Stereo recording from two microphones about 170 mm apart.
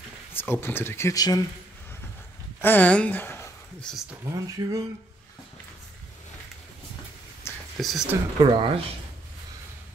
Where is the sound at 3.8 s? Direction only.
Centre (ahead or behind).